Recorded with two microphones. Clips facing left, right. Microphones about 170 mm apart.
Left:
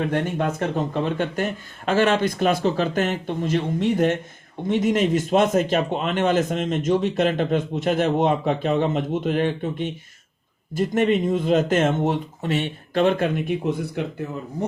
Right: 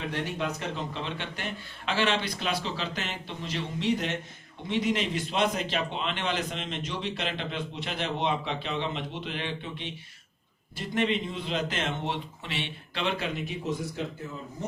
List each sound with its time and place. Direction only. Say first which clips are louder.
0.0 s a man's voice: left 9 dB; 50° left (ahead or behind)